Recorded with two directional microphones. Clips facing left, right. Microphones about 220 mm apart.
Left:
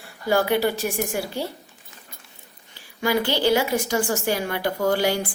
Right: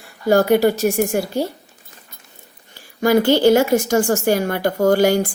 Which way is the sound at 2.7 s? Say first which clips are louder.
Right 7 dB; 45° right (ahead or behind).